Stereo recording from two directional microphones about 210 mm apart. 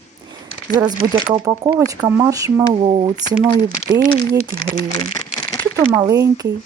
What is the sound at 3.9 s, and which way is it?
Speech, 40° right (ahead or behind).